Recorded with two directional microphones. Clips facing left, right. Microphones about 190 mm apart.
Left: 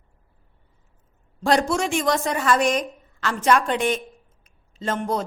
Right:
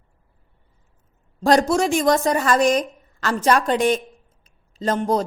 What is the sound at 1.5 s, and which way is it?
A woman's voice, 40° right (ahead or behind).